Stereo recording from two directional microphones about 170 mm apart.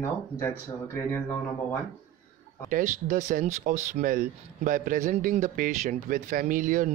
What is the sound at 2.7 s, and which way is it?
Speech, 50° right (ahead or behind).